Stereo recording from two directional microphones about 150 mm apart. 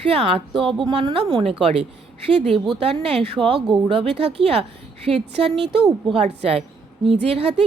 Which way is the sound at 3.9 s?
40° right (ahead or behind).